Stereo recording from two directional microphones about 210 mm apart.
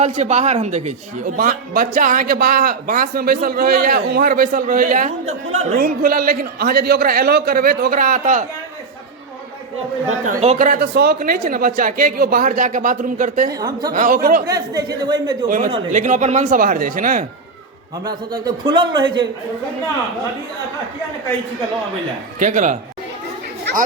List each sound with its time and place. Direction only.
0.0 s speech: 35° right (ahead or behind)
10.2 s speech: 35° right (ahead or behind)
13.5 s speech: 15° right (ahead or behind)
13.9 s speech: 40° right (ahead or behind)
14.4 s a man's voice: 15° right (ahead or behind)
15.4 s speech: 40° right (ahead or behind)
18.0 s a man's voice: 20° right (ahead or behind)
22.4 s speech: 35° right (ahead or behind)